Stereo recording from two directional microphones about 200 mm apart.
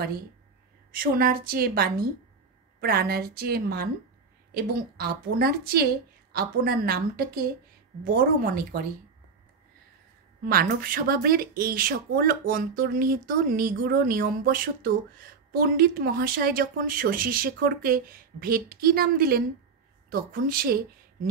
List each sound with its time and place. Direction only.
0.9 s speech: 45° right (ahead or behind)
10.4 s a woman's voice: 45° right (ahead or behind)